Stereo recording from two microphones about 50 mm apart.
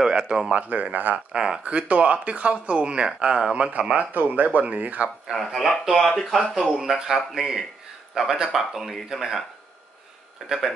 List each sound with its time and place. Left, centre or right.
0.1 s speech: centre
0.5 s speech: right
1.3 s speech: centre
4.1 s speech: right
5.3 s speech: centre
10.4 s speech: centre